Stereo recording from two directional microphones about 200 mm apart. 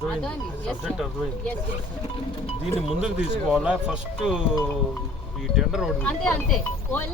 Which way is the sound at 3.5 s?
5° right (ahead or behind).